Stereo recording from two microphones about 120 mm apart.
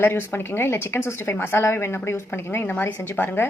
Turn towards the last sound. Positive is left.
turn(degrees=15)  # may be behind; listen again after turning